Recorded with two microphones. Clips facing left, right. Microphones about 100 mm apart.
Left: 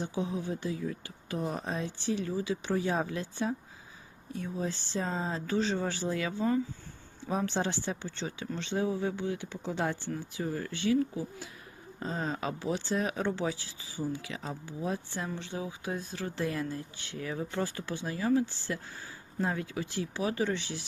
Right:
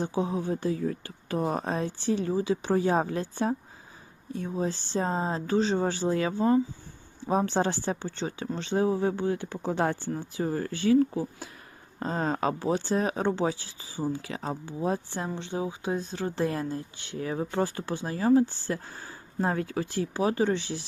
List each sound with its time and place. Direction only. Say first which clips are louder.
0.0 s speech: right 5 dB; 40° right (ahead or behind)
10.1 s speech: right 5 dB; 40° right (ahead or behind)